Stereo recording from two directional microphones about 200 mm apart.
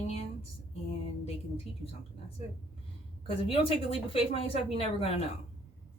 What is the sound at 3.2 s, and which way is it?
A woman's voice, 30° left (ahead or behind).